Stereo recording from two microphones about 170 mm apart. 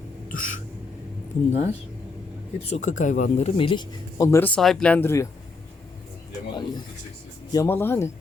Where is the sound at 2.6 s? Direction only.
40° left (ahead or behind); by 4.5 s 15° left (ahead or behind).